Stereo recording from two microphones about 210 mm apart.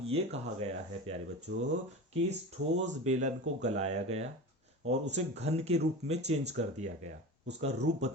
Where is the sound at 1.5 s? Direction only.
55° right (ahead or behind).